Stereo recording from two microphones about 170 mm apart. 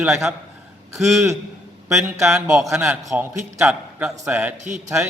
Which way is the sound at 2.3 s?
Centre (ahead or behind).